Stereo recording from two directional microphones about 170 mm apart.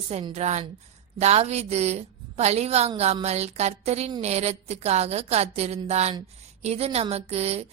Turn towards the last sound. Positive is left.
turn(degrees=-40)  # may be behind; listen again after turning